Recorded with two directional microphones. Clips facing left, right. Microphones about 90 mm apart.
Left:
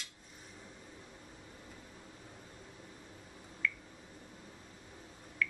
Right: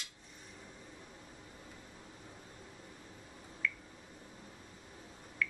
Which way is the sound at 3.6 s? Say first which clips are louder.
Left 1 dB; 5° right (ahead or behind).